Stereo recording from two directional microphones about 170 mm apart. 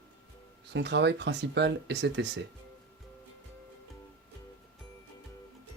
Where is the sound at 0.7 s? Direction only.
90° right.